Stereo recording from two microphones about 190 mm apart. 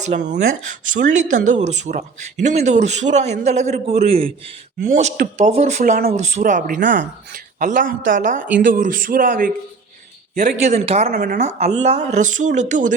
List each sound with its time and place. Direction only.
0.0 s speech: 40° right (ahead or behind)
10.6 s speech: 35° right (ahead or behind)
11.1 s speech: 55° right (ahead or behind)
11.3 s speech: 35° right (ahead or behind)